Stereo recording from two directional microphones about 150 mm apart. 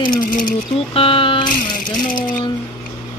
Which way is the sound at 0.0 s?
30° left (ahead or behind).